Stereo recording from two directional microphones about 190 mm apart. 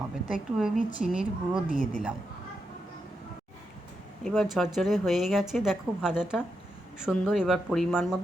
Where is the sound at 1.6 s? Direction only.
40° left (ahead or behind).